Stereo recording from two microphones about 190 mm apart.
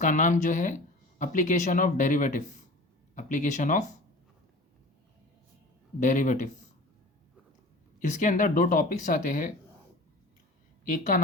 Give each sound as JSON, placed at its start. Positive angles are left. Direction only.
{"t": 0.0, "sound": "speech", "side_deg": 40}
{"t": 6.0, "sound": "speech", "side_deg": 40}
{"t": 7.9, "sound": "speech", "side_deg": 40}
{"t": 10.8, "sound": "speech", "side_deg": 40}